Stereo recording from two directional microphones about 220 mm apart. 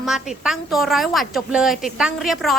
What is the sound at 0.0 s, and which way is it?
A woman's voice, centre (ahead or behind).